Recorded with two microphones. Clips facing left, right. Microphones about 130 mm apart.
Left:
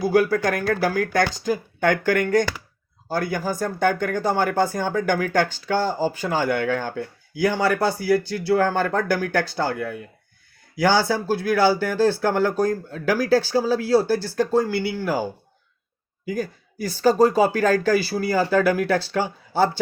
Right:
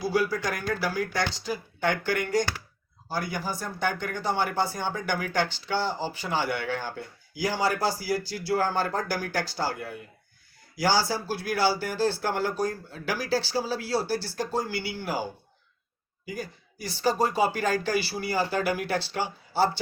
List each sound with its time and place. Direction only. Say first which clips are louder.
0.0 s speech: left 7 dB; 55° left (ahead or behind)
16.3 s speech: left 9 dB; 45° left (ahead or behind)